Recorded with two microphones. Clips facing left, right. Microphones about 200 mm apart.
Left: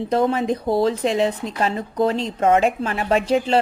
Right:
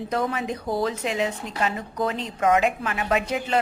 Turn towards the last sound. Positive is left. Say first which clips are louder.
# left 6 dB
turn(degrees=30)  # may be behind; listen again after turning